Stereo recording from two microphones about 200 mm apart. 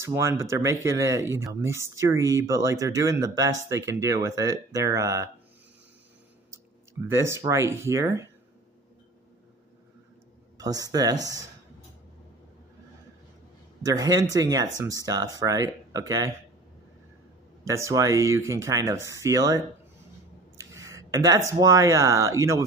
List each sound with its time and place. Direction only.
0.0 s speech: 15° right (ahead or behind)
6.5 s speech: 15° right (ahead or behind)
10.6 s speech: 20° right (ahead or behind)
13.8 s speech: 20° right (ahead or behind)
17.6 s speech: 15° right (ahead or behind)
20.9 s a sound: 15° right (ahead or behind)
21.5 s speech: 20° right (ahead or behind)